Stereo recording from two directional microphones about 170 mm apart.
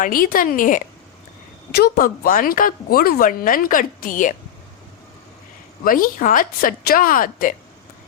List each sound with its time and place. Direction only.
0.0 s a woman's voice: 55° left (ahead or behind)
5.8 s speech: 55° left (ahead or behind)